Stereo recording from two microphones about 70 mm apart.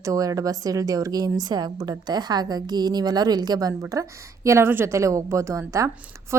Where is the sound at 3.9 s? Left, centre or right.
Right.